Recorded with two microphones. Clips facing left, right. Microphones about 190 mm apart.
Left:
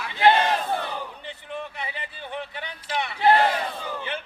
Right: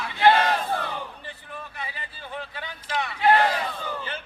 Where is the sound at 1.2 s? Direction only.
20° left (ahead or behind).